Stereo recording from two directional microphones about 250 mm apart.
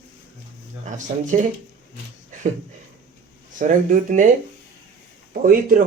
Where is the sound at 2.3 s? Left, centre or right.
Right.